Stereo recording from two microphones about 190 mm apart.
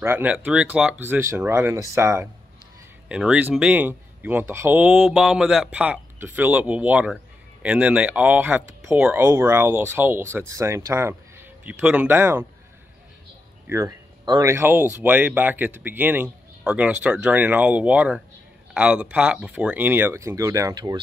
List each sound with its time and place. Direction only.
0.0 s speech: 10° right (ahead or behind)
13.7 s speech: 15° right (ahead or behind)